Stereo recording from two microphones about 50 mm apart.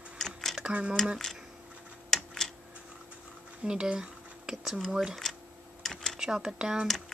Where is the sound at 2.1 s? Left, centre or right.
Centre.